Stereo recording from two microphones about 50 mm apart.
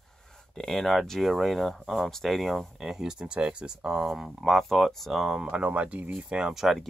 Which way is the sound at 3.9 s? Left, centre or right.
Centre.